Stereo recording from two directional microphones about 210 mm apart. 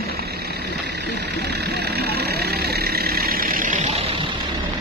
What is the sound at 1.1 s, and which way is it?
Vehicle, 50° right (ahead or behind).